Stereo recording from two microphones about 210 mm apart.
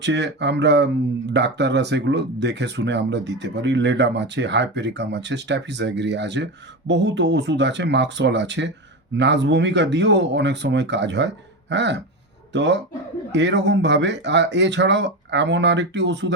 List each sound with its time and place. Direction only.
0.0 s speech: 55° right (ahead or behind)